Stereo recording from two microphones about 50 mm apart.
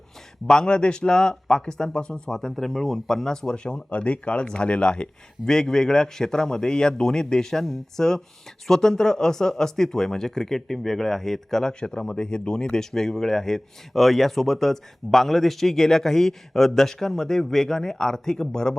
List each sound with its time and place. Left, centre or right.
0.4 s speech: centre